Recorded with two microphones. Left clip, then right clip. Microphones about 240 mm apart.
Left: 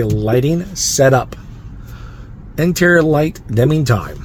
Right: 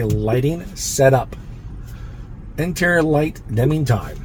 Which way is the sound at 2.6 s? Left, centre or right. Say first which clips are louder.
Left 5 dB; left.